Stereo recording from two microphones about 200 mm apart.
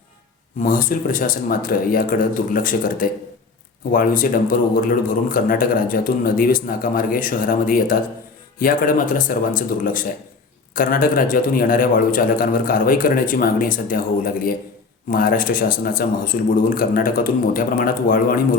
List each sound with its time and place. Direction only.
0.6 s a man's voice: 45° left (ahead or behind)
15.1 s a man's voice: 45° left (ahead or behind)